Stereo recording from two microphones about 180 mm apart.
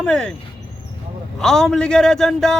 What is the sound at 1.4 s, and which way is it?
A man's voice, centre (ahead or behind).